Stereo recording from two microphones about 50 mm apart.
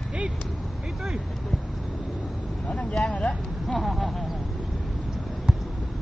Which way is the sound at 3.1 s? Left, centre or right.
Left.